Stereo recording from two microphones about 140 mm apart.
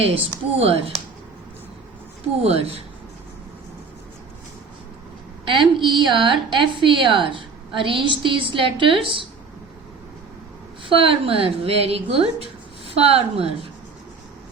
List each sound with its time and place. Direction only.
0.6 s a woman's voice: 45° right (ahead or behind)
2.4 s a woman's voice: 45° right (ahead or behind)
5.5 s a woman's voice: 35° right (ahead or behind)
10.8 s a woman's voice: 40° right (ahead or behind)